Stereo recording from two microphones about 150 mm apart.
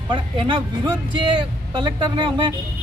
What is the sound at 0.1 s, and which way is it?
A man's voice, 35° right (ahead or behind).